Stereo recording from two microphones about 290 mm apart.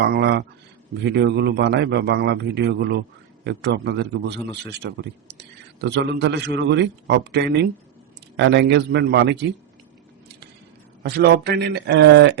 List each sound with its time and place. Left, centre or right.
0.0 s a man's voice: right
11.0 s a man's voice: right